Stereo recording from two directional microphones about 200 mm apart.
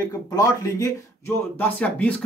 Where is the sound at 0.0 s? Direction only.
15° left (ahead or behind).